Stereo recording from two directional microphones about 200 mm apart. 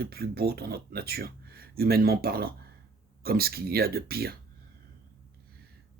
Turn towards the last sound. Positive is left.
turn(degrees=-50)  # may be behind; listen again after turning